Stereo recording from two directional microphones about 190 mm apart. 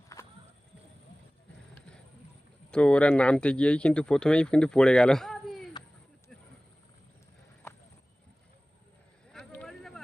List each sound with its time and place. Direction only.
0.1 s walk: 15° left (ahead or behind)
2.6 s speech: 5° left (ahead or behind)
9.3 s vehicle: 5° left (ahead or behind)